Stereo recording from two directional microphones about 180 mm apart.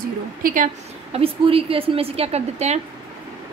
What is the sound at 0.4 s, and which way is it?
Speech, 50° right (ahead or behind).